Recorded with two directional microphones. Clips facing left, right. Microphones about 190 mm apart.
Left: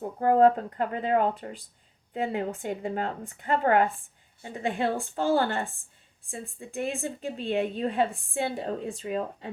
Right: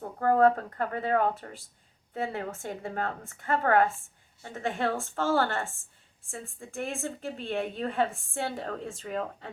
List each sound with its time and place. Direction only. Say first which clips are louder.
0.2 s a woman's voice: left 2 dB; 15° left (ahead or behind)